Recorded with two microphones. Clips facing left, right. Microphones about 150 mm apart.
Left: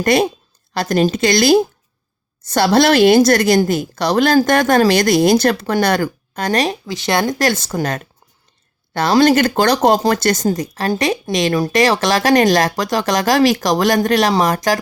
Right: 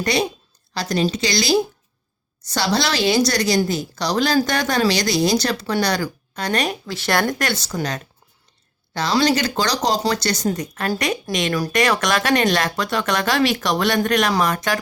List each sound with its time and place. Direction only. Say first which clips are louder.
0.0 s a woman's voice: left 6 dB; 50° left (ahead or behind); by 6.7 s 35° left (ahead or behind)
6.8 s speech: left 3 dB; 15° left (ahead or behind)
7.5 s a woman's voice: left 4 dB; 50° left (ahead or behind)
10.5 s speech: left 5 dB; 35° left (ahead or behind)